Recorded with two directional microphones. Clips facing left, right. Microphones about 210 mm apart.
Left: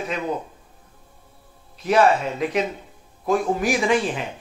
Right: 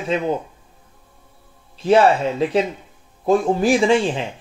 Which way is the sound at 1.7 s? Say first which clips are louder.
Right 3 dB; 30° right (ahead or behind).